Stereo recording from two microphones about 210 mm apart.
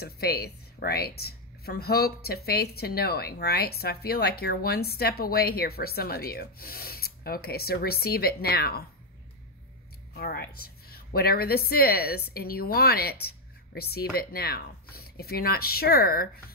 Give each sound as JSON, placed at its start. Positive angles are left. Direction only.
{"t": 0.0, "sound": "speech", "side_deg": 50}
{"t": 10.1, "sound": "speech", "side_deg": 50}